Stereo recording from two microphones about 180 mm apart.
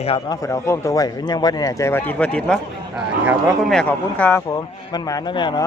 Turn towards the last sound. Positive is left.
turn(degrees=25)  # may be behind; listen again after turning